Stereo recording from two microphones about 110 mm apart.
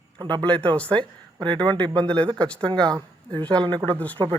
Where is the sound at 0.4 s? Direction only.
10° left (ahead or behind).